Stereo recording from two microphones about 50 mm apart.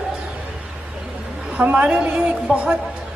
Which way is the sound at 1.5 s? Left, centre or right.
Right.